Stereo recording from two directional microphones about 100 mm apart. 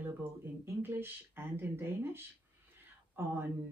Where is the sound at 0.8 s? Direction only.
20° right (ahead or behind).